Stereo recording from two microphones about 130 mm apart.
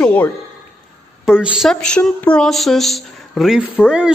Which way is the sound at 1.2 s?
5° right (ahead or behind).